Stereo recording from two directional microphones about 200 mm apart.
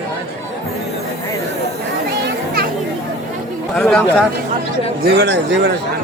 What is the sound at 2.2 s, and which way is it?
Children playing, 50° right (ahead or behind).